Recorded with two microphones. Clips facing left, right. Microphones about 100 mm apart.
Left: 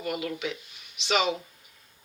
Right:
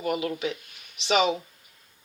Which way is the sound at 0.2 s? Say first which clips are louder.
Right 3 dB; 35° right (ahead or behind).